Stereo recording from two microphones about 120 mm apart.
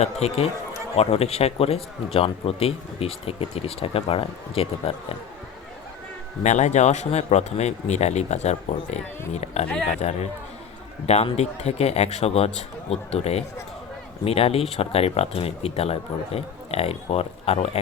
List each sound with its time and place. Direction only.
0.0 s speech: 60° left (ahead or behind)
6.4 s speech: 70° left (ahead or behind)